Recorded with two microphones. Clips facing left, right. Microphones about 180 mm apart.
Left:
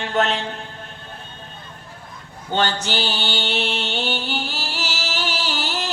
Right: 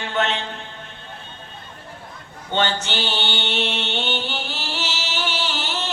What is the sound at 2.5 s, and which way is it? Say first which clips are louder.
Music: left 1 dB; 40° left (ahead or behind).